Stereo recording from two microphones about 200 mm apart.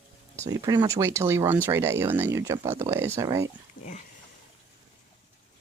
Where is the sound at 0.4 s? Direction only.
15° right (ahead or behind).